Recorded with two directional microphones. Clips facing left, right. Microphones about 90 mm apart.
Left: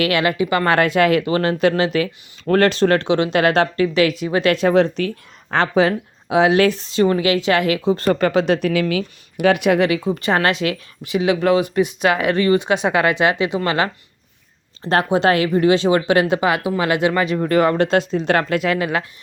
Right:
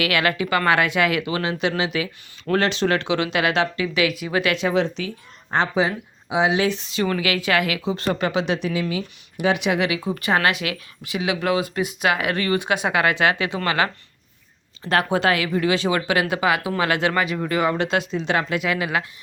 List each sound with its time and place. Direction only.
0.0 s speech: 30° left (ahead or behind)
0.8 s speech: 40° left (ahead or behind)
4.2 s speech: 30° left (ahead or behind); by 5.1 s 50° left (ahead or behind)
5.5 s speech: 65° left (ahead or behind)
6.7 s a woman's voice: 35° left (ahead or behind)
8.7 s a woman's voice: 70° left (ahead or behind); by 11.6 s 35° left (ahead or behind)
11.6 s speech: 20° right (ahead or behind)
12.0 s speech: 30° left (ahead or behind)
14.8 s speech: 30° left (ahead or behind)
17.5 s speech: 45° left (ahead or behind)